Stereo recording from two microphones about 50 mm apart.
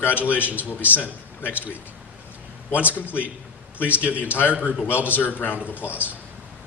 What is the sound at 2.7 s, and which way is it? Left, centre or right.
A man's voice, left.